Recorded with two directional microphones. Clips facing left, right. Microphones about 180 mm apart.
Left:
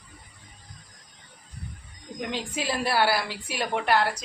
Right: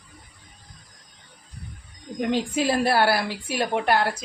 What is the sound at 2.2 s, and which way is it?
A woman's voice, 50° right (ahead or behind).